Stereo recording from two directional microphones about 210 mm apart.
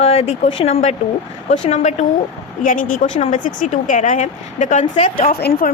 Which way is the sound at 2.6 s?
40° left (ahead or behind).